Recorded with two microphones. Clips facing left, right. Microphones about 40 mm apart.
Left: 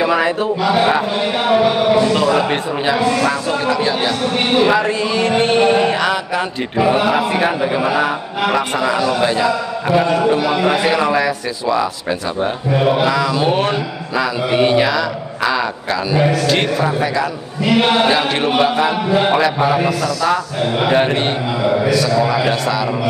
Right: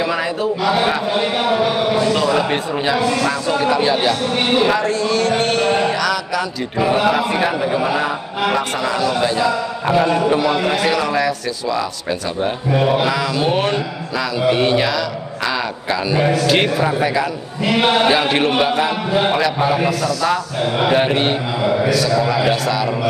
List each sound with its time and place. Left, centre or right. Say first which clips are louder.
0.0 s a man's voice: left 4 dB; centre
0.6 s a man's voice: left 3 dB; centre
3.8 s speech: right 1 dB; centre
4.4 s a man's voice: left 4 dB; centre
5.4 s mantra: left 4 dB; left
5.7 s mantra: left 2 dB; centre
6.8 s a man's voice: left 1 dB; centre
7.4 s mantra: left 1 dB; left
8.4 s speech: left 2 dB; centre
9.8 s a man's voice: left 1 dB; centre
10.4 s speech: left 2 dB; centre
10.8 s a man's voice: left 2 dB; centre